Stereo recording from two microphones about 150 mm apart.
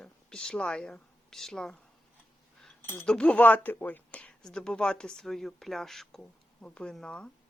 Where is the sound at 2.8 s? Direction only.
10° left (ahead or behind).